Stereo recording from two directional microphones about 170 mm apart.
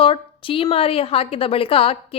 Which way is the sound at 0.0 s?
30° left (ahead or behind).